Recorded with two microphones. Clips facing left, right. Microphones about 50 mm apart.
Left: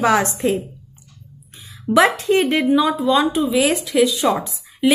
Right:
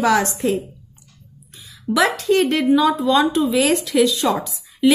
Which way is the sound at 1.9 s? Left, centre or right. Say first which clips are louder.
Left 2 dB; left.